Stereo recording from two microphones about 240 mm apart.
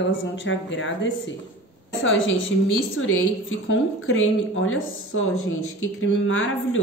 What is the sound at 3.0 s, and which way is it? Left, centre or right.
A woman's voice, left.